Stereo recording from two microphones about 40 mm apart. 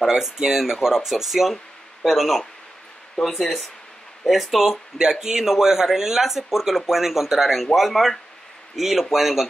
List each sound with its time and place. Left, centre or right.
0.0 s speech: centre
4.6 s speech: centre